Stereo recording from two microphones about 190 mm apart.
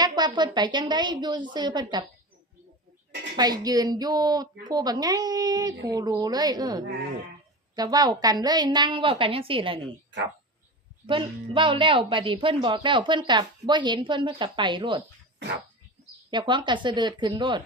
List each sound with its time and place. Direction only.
0.0 s a woman's voice: 20° right (ahead or behind)
3.3 s a woman's voice: 20° right (ahead or behind)
11.0 s a woman's voice: 25° right (ahead or behind)
16.3 s a woman's voice: 25° right (ahead or behind)